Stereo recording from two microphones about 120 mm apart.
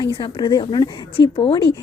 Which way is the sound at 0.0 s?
40° left (ahead or behind).